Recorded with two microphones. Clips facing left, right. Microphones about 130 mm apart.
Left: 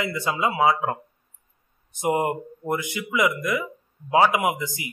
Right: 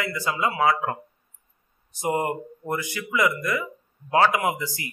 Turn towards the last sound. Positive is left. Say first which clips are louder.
# left 1 dB
turn(degrees=15)  # may be behind; listen again after turning